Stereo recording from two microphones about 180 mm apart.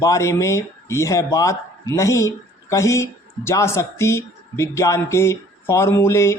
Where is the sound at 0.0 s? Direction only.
15° left (ahead or behind).